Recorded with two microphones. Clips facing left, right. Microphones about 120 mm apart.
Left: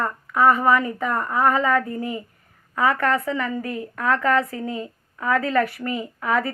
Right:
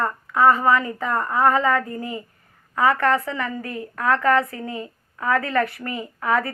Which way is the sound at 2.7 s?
25° right (ahead or behind).